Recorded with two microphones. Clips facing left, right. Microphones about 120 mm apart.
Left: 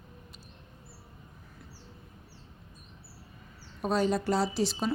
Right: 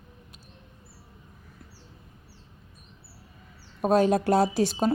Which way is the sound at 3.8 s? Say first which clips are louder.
Right 6 dB; 50° right (ahead or behind).